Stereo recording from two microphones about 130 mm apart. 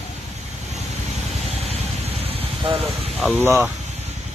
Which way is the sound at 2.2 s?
45° right (ahead or behind).